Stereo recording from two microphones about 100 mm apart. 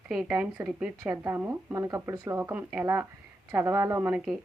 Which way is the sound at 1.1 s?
30° right (ahead or behind).